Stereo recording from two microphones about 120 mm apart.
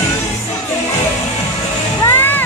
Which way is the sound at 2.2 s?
15° left (ahead or behind).